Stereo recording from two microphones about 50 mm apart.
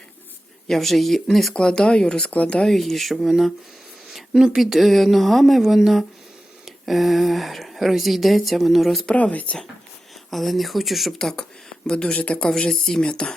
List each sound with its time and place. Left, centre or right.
0.7 s speech: centre
1.5 s speech: centre
2.3 s speech: left
2.6 s speech: centre
3.2 s speech: centre
4.6 s speech: centre
9.1 s speech: left
10.3 s speech: centre
11.2 s speech: centre